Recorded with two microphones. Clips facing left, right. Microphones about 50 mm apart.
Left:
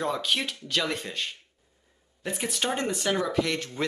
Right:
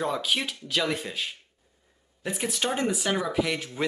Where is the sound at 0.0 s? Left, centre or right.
Centre.